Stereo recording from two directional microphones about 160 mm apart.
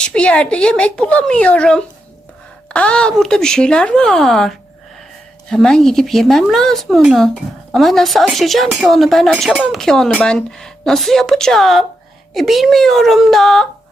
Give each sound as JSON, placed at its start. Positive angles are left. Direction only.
{"t": 0.0, "sound": "speech", "side_deg": 5}